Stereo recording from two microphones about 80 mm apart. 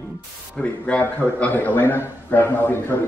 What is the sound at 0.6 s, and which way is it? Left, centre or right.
A man's voice, centre.